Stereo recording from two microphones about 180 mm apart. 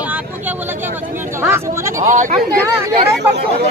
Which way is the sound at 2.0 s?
45° right (ahead or behind).